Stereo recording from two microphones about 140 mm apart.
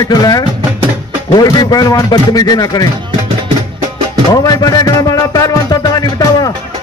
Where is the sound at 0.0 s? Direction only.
25° left (ahead or behind).